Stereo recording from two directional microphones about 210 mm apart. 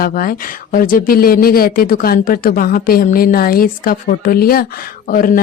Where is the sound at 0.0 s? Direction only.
45° left (ahead or behind).